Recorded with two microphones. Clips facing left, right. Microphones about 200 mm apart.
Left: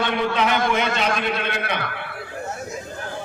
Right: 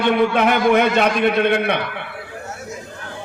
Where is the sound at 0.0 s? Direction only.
55° right (ahead or behind).